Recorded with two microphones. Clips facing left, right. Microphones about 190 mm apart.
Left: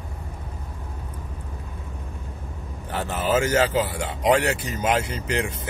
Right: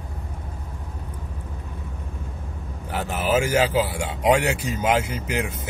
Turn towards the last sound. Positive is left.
turn(degrees=-10)  # may be behind; listen again after turning